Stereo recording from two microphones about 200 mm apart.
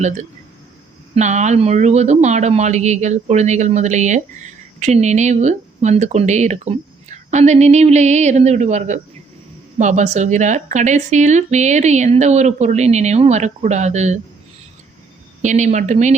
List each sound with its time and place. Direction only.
0.0 s speech: 35° right (ahead or behind)
15.4 s speech: 35° right (ahead or behind)